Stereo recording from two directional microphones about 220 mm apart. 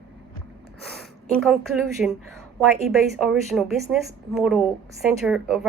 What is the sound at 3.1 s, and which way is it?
A woman's voice, centre (ahead or behind).